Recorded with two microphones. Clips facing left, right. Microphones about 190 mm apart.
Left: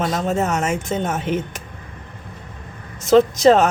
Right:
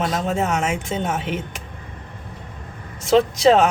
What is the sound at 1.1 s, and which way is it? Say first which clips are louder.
Speech: left 3 dB; 45° left (ahead or behind).